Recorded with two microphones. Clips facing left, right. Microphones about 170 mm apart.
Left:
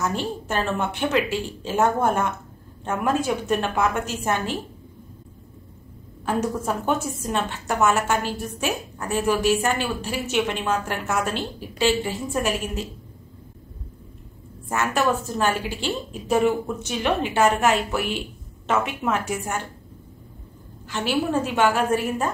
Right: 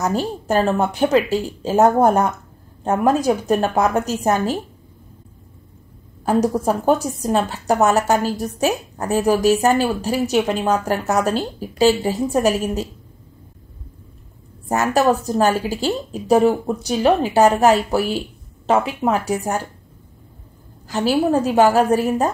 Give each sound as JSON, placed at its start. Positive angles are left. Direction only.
{"t": 0.0, "sound": "a woman's voice", "side_deg": -40}
{"t": 6.2, "sound": "a woman's voice", "side_deg": -35}
{"t": 14.7, "sound": "a woman's voice", "side_deg": -40}
{"t": 20.8, "sound": "a woman's voice", "side_deg": -40}